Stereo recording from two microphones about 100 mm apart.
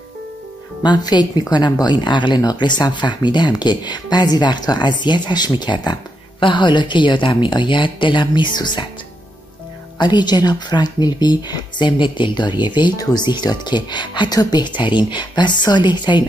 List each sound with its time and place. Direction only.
0.8 s speech: 45° left (ahead or behind)
9.9 s speech: 45° left (ahead or behind)